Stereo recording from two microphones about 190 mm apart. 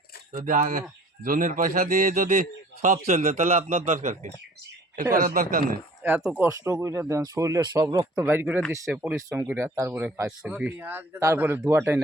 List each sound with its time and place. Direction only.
0.3 s speech: 45° right (ahead or behind)
6.0 s speech: 10° right (ahead or behind)